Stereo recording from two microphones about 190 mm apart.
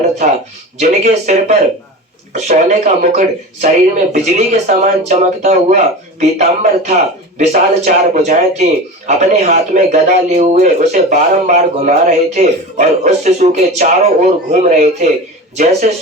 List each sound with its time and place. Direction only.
0.8 s speech: 40° right (ahead or behind)